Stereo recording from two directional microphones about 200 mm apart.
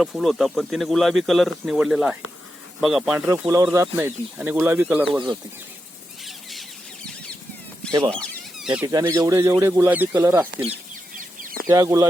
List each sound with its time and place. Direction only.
0.0 s speech: centre (ahead or behind)
3.5 s speech: 15° right (ahead or behind)
6.2 s a sound: centre (ahead or behind)
8.1 s a sound: 5° left (ahead or behind)
8.9 s speech: 15° right (ahead or behind)
11.2 s chicken: 45° right (ahead or behind)
11.7 s speech: 15° right (ahead or behind)